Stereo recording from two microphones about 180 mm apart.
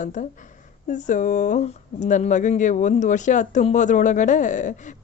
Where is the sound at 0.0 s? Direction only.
45° left (ahead or behind).